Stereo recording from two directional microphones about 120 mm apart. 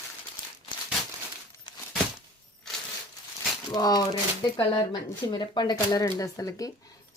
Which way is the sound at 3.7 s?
35° left (ahead or behind).